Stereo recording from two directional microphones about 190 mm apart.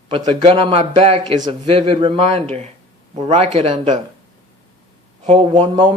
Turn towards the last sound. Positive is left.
turn(degrees=-25)  # may be behind; listen again after turning